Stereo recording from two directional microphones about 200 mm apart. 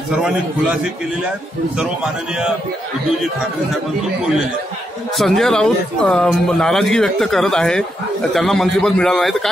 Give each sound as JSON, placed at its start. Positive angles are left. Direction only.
{"t": 5.1, "sound": "speech", "side_deg": 0}